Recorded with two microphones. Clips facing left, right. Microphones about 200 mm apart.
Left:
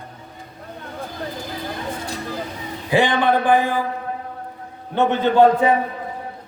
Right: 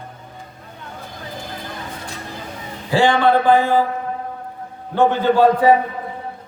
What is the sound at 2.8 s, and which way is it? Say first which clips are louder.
Speech: right 2 dB; 20° left (ahead or behind).